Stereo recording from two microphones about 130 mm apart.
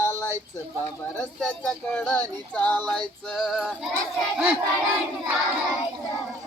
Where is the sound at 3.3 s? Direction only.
Centre (ahead or behind).